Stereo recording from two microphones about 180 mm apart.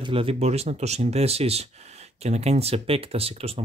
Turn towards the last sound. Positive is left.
turn(degrees=-35)  # may be behind; listen again after turning